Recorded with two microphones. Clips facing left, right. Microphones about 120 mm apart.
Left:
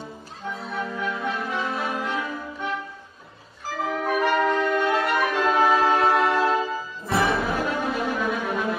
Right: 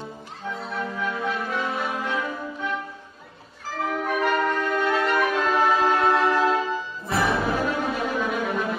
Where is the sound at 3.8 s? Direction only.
Centre (ahead or behind).